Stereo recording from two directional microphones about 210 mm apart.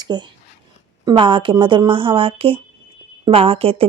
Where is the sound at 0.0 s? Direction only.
20° right (ahead or behind).